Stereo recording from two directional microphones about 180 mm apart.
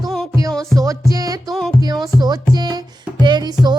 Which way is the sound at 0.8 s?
20° right (ahead or behind).